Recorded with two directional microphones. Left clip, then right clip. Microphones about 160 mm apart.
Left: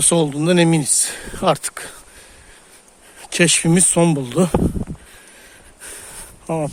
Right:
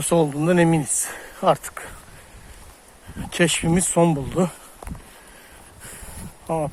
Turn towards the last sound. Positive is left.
turn(degrees=75)  # may be behind; listen again after turning